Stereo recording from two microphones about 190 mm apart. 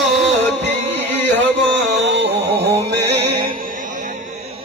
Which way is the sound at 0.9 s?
65° right (ahead or behind).